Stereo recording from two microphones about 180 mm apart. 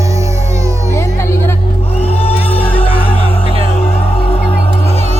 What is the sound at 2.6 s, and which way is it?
Music, 10° left (ahead or behind).